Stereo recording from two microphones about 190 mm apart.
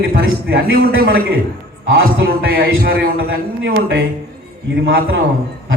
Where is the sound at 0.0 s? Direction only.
55° right (ahead or behind).